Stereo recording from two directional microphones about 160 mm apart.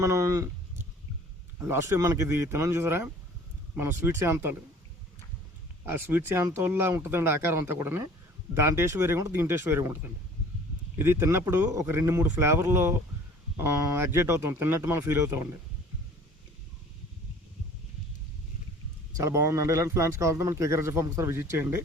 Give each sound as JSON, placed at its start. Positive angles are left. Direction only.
{"t": 0.0, "sound": "speech", "side_deg": -20}
{"t": 1.6, "sound": "a man's voice", "side_deg": -20}
{"t": 5.8, "sound": "a man's voice", "side_deg": -15}
{"t": 19.1, "sound": "a man's voice", "side_deg": -20}